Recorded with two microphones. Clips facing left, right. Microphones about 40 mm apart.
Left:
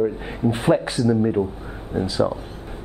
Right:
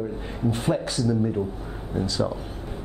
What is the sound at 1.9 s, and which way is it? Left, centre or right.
Speech, centre.